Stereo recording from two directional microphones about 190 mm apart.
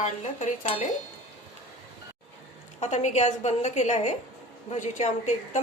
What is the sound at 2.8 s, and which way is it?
A woman's voice, 40° left (ahead or behind).